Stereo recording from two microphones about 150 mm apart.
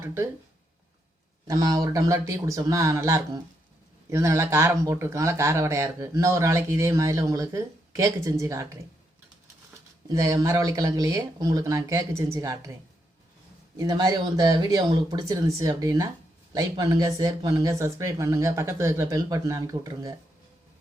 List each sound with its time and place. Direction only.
0.0 s speech: 15° right (ahead or behind)
1.5 s speech: 25° right (ahead or behind)
10.1 s speech: 20° right (ahead or behind)
13.7 s speech: 25° right (ahead or behind)